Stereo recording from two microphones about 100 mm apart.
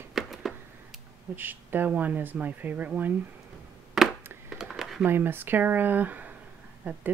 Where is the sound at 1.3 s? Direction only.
20° right (ahead or behind).